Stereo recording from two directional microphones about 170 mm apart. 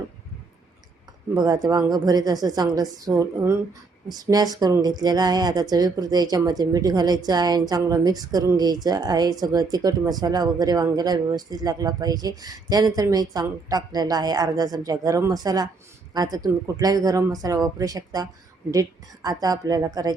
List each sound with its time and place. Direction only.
1.3 s a woman's voice: 20° right (ahead or behind)